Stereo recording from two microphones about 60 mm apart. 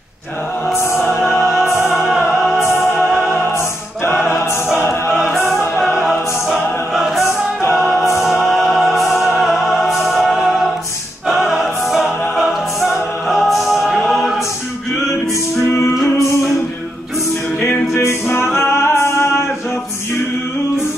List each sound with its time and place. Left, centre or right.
0.7 s music: left
1.2 s music: centre
4.3 s choir: left
5.1 s music: centre
6.5 s choir: centre
8.2 s music: centre
17.6 s music: left